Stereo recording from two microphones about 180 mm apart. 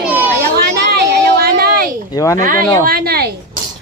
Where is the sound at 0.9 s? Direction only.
60° right (ahead or behind).